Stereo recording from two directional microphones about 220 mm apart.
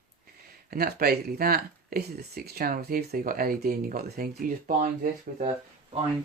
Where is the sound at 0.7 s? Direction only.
45° right (ahead or behind).